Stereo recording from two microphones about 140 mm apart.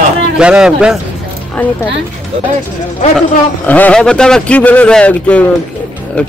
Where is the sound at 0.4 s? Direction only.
5° right (ahead or behind).